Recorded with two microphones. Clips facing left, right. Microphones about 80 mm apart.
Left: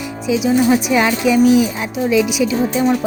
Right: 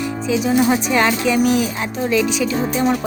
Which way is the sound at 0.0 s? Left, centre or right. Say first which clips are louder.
Left 1 dB; centre.